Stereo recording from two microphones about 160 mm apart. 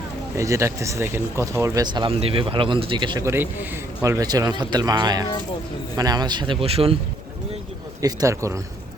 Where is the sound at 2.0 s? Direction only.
35° right (ahead or behind).